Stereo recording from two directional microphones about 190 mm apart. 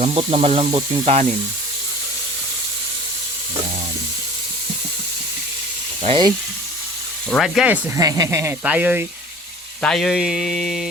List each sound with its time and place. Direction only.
0.0 s speech: 30° right (ahead or behind)
6.0 s speech: 25° right (ahead or behind)
7.3 s speech: centre (ahead or behind)
9.8 s a sound: centre (ahead or behind)